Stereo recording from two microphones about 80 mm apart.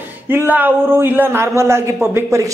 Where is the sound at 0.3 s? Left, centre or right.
Right.